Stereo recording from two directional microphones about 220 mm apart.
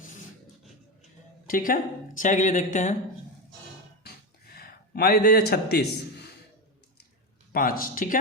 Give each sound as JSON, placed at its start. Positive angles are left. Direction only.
{"t": 1.5, "sound": "speech", "side_deg": 40}
{"t": 4.5, "sound": "a man's voice", "side_deg": 45}
{"t": 7.5, "sound": "speech", "side_deg": 40}